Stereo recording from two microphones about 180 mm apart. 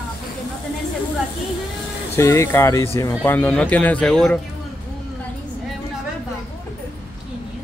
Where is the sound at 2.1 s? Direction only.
15° left (ahead or behind).